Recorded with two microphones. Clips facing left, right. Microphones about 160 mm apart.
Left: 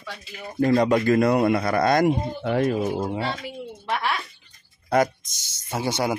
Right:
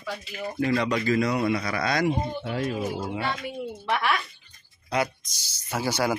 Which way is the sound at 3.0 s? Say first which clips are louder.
Left 2 dB; 30° left (ahead or behind).